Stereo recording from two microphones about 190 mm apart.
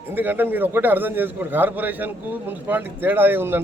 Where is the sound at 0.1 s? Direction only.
10° right (ahead or behind).